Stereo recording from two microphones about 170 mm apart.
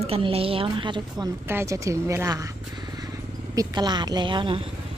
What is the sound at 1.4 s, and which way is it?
Speech, 15° right (ahead or behind).